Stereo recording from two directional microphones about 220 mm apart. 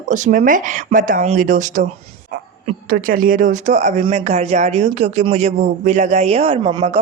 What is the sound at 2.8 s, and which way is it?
Speech, 40° right (ahead or behind).